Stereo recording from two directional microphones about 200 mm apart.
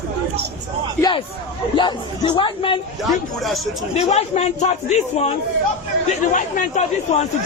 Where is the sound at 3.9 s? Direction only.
30° left (ahead or behind).